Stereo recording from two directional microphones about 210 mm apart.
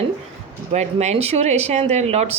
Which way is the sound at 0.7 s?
30° right (ahead or behind).